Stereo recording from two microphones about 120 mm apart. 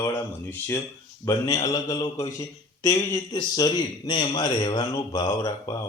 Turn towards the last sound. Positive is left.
turn(degrees=30)  # may be behind; listen again after turning